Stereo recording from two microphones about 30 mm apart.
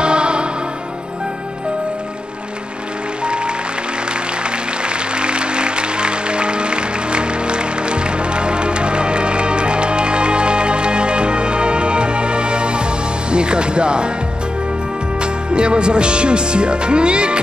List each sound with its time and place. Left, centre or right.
0.0 s music: right
4.8 s music: right
13.3 s speech: right
15.5 s speech: right